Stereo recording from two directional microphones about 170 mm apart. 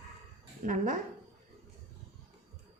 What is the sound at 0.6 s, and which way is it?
Speech, 50° right (ahead or behind).